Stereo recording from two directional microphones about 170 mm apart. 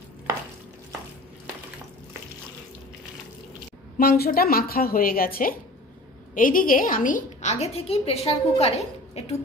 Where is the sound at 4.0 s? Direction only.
60° left (ahead or behind); by 9.4 s 35° left (ahead or behind).